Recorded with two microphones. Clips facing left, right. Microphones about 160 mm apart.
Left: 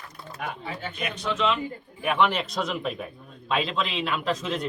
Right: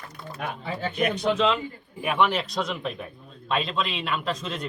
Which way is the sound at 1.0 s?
35° right (ahead or behind).